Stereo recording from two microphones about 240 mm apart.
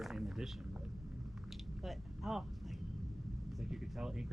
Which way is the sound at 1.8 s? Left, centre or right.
Centre.